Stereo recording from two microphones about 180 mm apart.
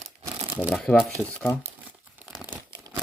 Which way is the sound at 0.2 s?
30° right (ahead or behind).